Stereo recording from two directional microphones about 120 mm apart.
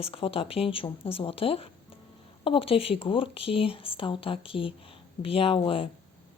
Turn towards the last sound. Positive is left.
turn(degrees=50)  # may be behind; listen again after turning